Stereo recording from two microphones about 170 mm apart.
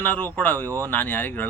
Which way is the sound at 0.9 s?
10° left (ahead or behind).